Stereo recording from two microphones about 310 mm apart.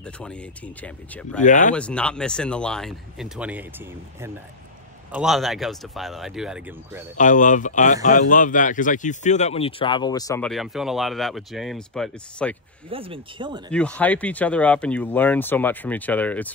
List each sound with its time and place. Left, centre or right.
0.0 s speech: centre
1.4 s speech: left
1.8 s speech: centre
7.2 s speech: left; by 12.5 s centre
12.9 s speech: centre
13.7 s speech: centre